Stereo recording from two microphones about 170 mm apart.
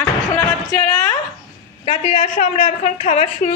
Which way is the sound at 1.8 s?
40° left (ahead or behind).